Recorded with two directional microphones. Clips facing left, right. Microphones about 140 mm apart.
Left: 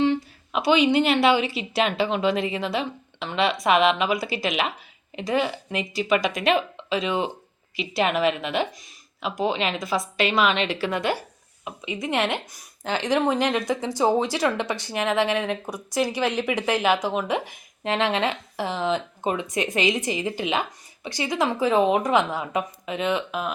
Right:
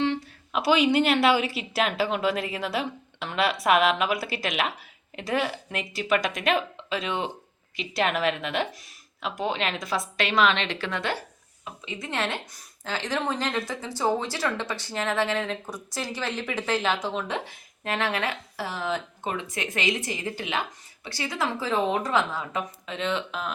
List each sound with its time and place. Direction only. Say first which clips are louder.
0.0 s a woman's voice: left 4 dB; centre (ahead or behind)